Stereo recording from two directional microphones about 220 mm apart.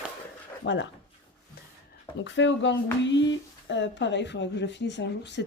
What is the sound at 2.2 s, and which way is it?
Speech, 55° left (ahead or behind).